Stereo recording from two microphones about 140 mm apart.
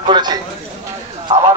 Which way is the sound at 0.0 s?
30° right (ahead or behind).